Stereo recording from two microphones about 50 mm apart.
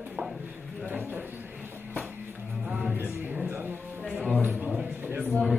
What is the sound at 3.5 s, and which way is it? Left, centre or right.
Music, right.